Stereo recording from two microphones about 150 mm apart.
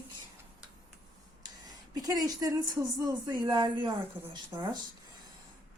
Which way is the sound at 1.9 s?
25° right (ahead or behind).